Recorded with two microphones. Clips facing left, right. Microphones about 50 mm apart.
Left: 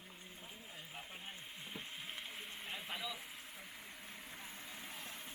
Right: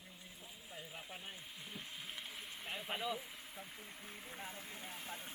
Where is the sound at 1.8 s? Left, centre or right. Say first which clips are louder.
Left 1 dB; left.